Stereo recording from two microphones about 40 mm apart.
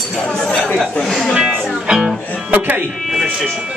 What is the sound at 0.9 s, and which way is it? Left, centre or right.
Speech, centre.